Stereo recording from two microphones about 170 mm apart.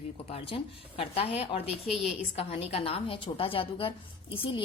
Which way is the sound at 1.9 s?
Centre (ahead or behind).